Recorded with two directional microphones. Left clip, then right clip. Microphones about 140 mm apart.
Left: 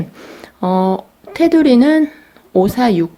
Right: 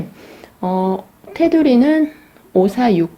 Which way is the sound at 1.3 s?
25° left (ahead or behind).